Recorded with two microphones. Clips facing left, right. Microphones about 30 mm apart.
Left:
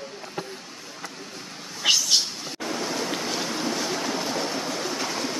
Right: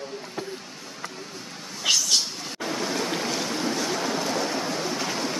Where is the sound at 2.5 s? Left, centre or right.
Centre.